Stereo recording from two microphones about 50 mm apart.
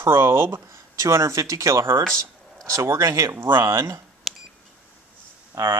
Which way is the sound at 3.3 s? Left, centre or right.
Right.